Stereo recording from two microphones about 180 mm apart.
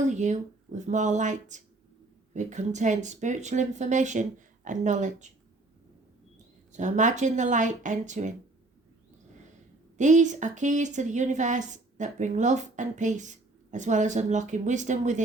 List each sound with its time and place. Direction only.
0.0 s speech: 40° right (ahead or behind)
6.7 s speech: 45° right (ahead or behind)
10.0 s speech: 45° right (ahead or behind)